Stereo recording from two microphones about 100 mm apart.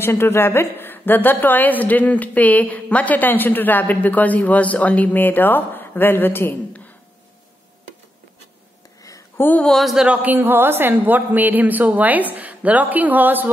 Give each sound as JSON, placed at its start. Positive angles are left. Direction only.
{"t": 0.0, "sound": "a woman's voice", "side_deg": 25}
{"t": 9.4, "sound": "a woman's voice", "side_deg": 15}
{"t": 9.7, "sound": "a man's voice", "side_deg": 0}
{"t": 10.0, "sound": "a woman's voice", "side_deg": -15}